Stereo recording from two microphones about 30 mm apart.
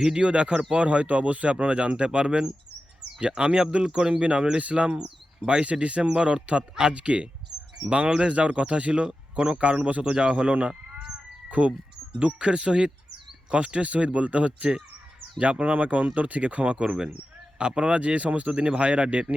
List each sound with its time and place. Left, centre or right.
0.2 s speech: right
3.8 s speech: right
4.1 s speech: right
4.6 s speech: right
5.5 s speech: right
10.7 s a sound: right
11.6 s speech: right
12.2 s speech: right
16.7 s speech: right